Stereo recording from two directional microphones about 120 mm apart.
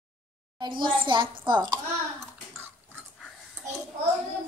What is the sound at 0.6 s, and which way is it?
A child's voice, 40° right (ahead or behind).